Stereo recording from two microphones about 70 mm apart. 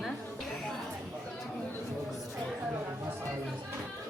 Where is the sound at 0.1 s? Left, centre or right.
Centre.